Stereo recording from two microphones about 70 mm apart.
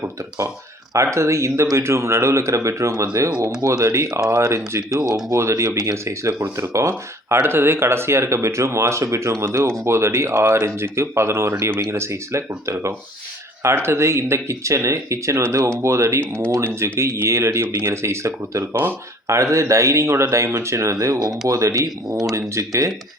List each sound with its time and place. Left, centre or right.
0.9 s speech: right
5.4 s speech: right
22.2 s speech: right